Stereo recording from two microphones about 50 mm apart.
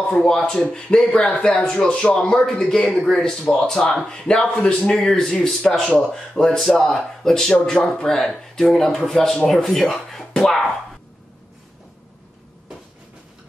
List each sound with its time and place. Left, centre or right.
0.1 s speech: centre